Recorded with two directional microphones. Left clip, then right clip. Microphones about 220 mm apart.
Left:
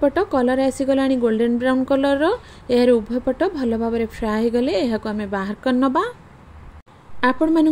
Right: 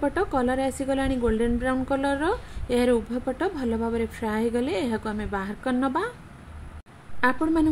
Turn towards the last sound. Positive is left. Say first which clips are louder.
# left 5 dB
turn(degrees=20)  # may be behind; listen again after turning